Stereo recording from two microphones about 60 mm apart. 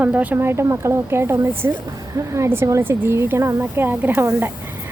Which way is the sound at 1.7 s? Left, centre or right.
Right.